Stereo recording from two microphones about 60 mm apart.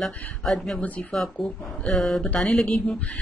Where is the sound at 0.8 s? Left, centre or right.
Left.